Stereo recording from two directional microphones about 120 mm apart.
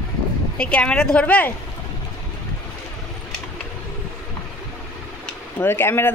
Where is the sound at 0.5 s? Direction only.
10° left (ahead or behind).